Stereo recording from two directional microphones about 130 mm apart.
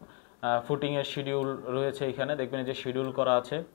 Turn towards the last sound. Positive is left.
turn(degrees=20)  # may be behind; listen again after turning